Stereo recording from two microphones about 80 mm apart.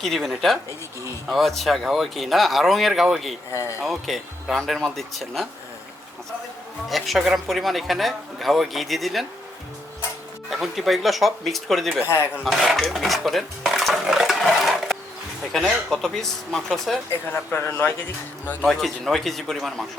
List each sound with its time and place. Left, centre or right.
0.0 s a woman's voice: centre
6.8 s a woman's voice: centre
10.5 s a woman's voice: centre
12.0 s speech: left
12.5 s a woman's voice: centre
12.8 s stir: centre
15.5 s a woman's voice: centre
17.1 s speech: left
18.6 s a woman's voice: centre